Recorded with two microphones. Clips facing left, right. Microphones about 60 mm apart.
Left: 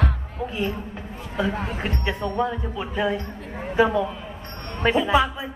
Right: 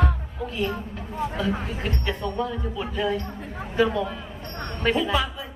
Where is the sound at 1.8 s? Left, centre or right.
Left.